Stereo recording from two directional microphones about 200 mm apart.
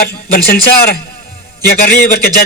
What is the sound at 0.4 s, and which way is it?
A man's voice, 55° left (ahead or behind).